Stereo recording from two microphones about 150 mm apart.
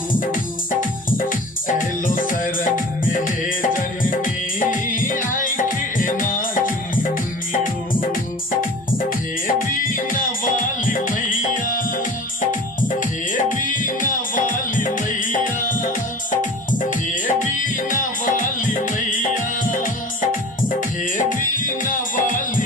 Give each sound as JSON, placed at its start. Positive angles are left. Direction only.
{"t": 0.7, "sound": "music", "side_deg": 65}
{"t": 9.5, "sound": "music", "side_deg": 65}
{"t": 21.2, "sound": "music", "side_deg": 60}